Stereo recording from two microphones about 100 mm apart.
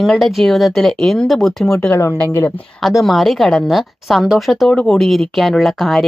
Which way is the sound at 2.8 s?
Centre (ahead or behind).